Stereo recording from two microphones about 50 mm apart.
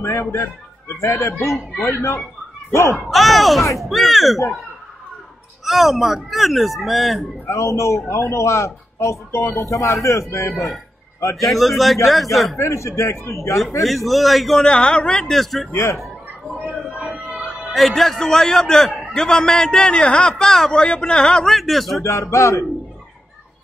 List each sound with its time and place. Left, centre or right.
0.0 s a man's voice: left
3.0 s speech: centre
5.7 s speech: centre
7.4 s a man's voice: left
10.5 s speech: centre
12.5 s speech: left
13.8 s speech: centre
14.6 s a man's voice: centre
15.3 s speech: centre
15.7 s speech: left
17.3 s a man's voice: centre
21.5 s speech: centre
22.0 s speech: left